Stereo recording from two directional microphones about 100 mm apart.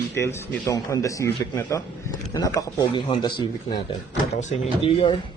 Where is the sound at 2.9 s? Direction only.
55° left (ahead or behind).